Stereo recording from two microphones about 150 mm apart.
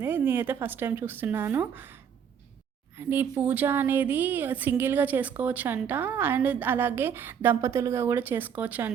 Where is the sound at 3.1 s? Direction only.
10° right (ahead or behind).